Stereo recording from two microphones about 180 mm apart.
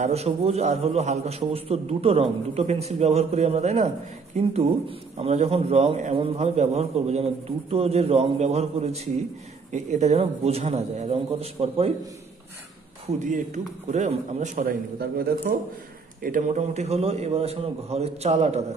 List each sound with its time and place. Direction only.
0.0 s a man's voice: 35° right (ahead or behind)
5.1 s a man's voice: 35° right (ahead or behind)
13.0 s a man's voice: 45° right (ahead or behind)
14.6 s a man's voice: 55° right (ahead or behind); by 18.6 s 40° right (ahead or behind)